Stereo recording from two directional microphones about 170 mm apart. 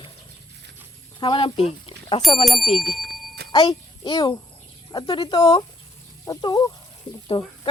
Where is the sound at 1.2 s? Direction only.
30° left (ahead or behind).